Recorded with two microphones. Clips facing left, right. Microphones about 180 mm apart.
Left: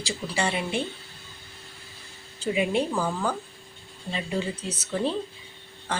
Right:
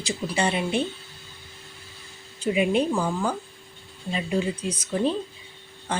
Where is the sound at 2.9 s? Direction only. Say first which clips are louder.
Right 2 dB; 10° right (ahead or behind).